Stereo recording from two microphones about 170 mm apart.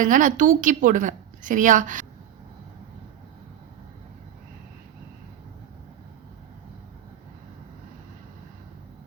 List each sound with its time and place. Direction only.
0.0 s a woman's voice: 50° right (ahead or behind)